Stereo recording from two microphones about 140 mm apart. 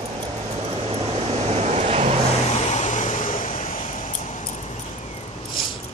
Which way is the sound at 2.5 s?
50° left (ahead or behind).